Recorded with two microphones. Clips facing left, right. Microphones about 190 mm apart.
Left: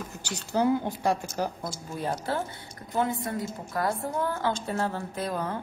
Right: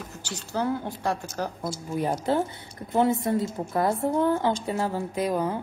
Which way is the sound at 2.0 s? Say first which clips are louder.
Right 5 dB; 15° right (ahead or behind).